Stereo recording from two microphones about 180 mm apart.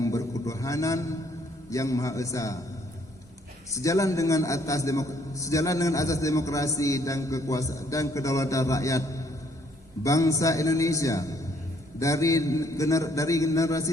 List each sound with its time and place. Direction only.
0.0 s a sound: 20° left (ahead or behind)
1.7 s a man's voice: 15° left (ahead or behind)
3.8 s a man's voice: 15° left (ahead or behind)